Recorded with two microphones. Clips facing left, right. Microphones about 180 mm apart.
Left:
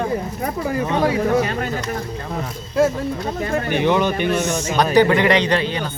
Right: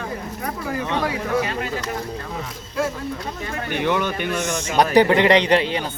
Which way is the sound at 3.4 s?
45° left (ahead or behind).